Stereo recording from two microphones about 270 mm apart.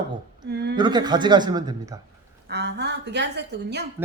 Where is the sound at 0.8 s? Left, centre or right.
Centre.